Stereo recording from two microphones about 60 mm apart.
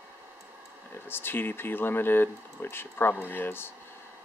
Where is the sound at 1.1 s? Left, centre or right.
Left.